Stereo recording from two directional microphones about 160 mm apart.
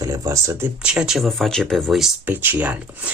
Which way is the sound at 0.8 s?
5° right (ahead or behind).